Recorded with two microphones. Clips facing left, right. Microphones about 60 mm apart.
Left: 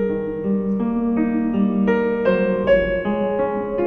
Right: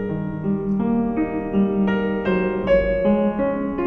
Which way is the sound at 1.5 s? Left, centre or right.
Centre.